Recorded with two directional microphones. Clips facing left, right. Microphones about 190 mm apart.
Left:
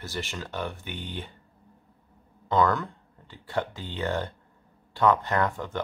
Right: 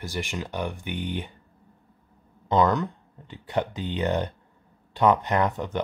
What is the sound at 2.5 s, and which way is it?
Speech, 20° right (ahead or behind).